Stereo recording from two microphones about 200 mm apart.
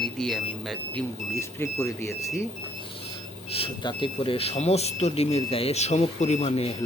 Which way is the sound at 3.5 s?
25° left (ahead or behind).